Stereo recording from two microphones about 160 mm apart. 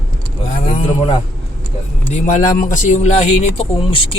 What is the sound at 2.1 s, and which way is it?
Speech, 50° left (ahead or behind).